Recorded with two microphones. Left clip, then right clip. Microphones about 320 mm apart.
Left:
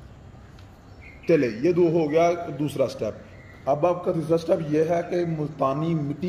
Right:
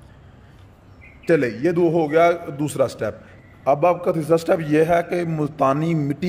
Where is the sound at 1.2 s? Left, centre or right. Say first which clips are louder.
Right 2 dB; right.